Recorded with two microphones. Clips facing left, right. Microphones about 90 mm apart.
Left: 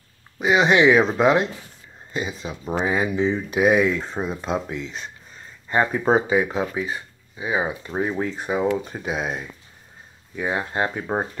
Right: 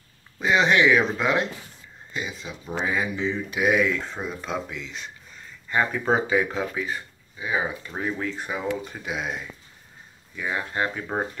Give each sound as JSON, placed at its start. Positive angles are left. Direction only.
{"t": 0.4, "sound": "speech", "side_deg": 10}
{"t": 0.7, "sound": "speech", "side_deg": 25}